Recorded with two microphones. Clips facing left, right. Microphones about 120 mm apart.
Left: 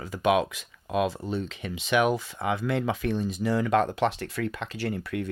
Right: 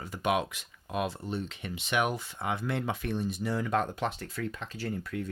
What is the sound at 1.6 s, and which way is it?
Speech, 90° left.